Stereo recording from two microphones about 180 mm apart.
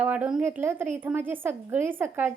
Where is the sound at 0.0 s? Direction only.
10° right (ahead or behind).